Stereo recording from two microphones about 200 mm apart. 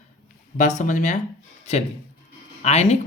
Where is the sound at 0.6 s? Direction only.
35° left (ahead or behind).